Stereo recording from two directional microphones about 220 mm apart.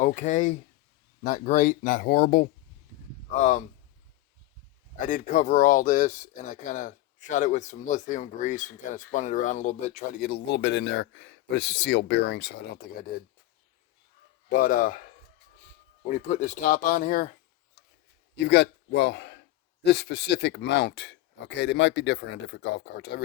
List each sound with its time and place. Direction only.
0.0 s speech: 35° left (ahead or behind)
4.9 s speech: 35° left (ahead or behind)
14.5 s speech: 40° left (ahead or behind)
16.0 s speech: 35° left (ahead or behind)
18.3 s speech: 50° left (ahead or behind)